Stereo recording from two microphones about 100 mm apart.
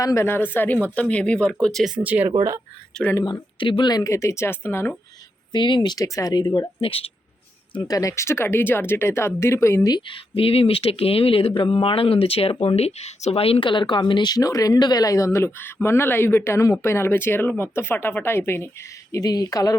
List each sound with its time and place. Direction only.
0.0 s speech: 30° left (ahead or behind); by 1.9 s 5° left (ahead or behind)
2.0 s speech: 15° right (ahead or behind)
2.9 s speech: 5° left (ahead or behind)
3.6 s speech: 55° left (ahead or behind); by 4.9 s 20° left (ahead or behind)
5.5 s speech: 50° left (ahead or behind)
6.4 s speech: 50° left (ahead or behind)
6.8 s speech: 70° left (ahead or behind)
7.9 s speech: 35° left (ahead or behind)
9.9 s speech: 60° left (ahead or behind); by 19.7 s 35° left (ahead or behind)